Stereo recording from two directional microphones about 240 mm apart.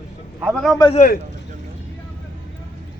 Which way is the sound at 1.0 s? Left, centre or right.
Left.